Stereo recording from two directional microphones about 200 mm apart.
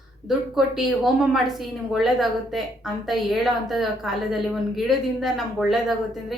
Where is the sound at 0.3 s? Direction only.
Centre (ahead or behind).